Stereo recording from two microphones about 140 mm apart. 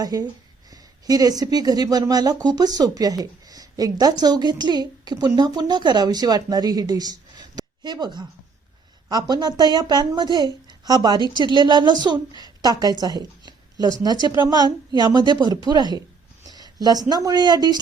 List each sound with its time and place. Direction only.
0.0 s a woman's voice: 25° right (ahead or behind)